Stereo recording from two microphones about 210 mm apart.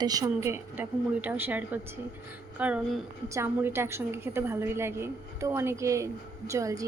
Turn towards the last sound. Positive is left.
turn(degrees=-15)  # may be behind; listen again after turning